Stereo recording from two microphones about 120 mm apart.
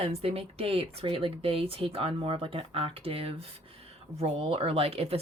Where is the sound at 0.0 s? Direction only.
60° right (ahead or behind).